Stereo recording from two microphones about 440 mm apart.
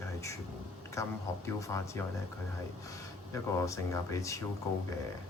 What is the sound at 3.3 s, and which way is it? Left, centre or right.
Speech, centre.